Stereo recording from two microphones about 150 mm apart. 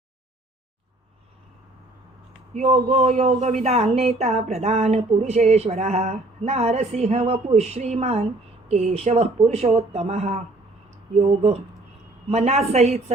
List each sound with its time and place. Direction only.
2.6 s speech: 45° right (ahead or behind)